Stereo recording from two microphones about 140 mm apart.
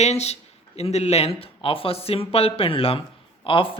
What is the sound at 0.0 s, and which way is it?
A man's voice, 50° left (ahead or behind).